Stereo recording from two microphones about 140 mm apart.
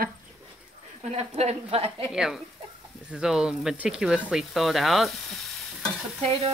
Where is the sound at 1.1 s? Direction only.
50° right (ahead or behind).